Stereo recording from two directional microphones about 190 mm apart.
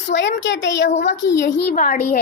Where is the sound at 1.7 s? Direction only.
50° left (ahead or behind).